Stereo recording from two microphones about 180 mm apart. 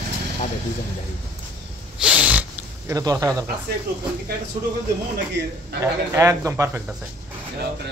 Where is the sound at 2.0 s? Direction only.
5° right (ahead or behind).